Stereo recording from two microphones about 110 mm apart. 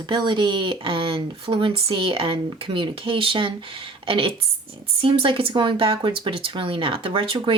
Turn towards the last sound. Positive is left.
turn(degrees=-50)  # may be behind; listen again after turning